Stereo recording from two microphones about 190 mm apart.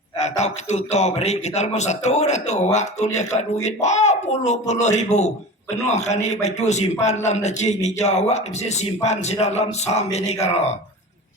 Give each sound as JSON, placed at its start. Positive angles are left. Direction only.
{"t": 0.2, "sound": "a man's voice", "side_deg": 35}